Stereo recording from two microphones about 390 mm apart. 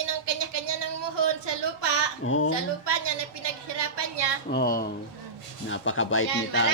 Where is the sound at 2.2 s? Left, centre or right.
Left.